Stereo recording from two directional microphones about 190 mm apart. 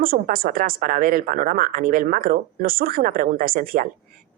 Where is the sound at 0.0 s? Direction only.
50° right (ahead or behind).